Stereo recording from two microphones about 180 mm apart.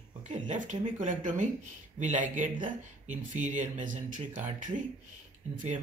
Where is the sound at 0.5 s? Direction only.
45° right (ahead or behind).